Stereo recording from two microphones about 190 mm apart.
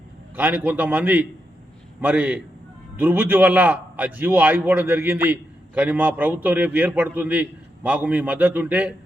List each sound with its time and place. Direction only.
0.3 s a man's voice: 10° right (ahead or behind)